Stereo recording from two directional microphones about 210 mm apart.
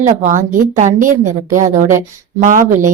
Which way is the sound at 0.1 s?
35° right (ahead or behind).